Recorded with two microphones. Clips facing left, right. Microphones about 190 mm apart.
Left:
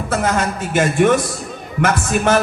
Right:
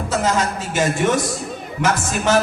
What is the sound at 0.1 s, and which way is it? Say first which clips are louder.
A woman's voice: left 1 dB; 55° left (ahead or behind).